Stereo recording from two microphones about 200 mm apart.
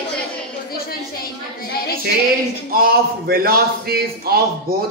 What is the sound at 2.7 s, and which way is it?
A man's voice, 50° right (ahead or behind).